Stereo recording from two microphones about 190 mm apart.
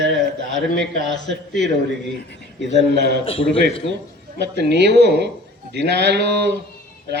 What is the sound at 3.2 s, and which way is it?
Speech, 30° left (ahead or behind).